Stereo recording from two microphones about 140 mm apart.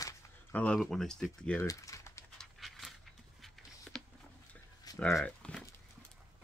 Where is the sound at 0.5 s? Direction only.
10° left (ahead or behind).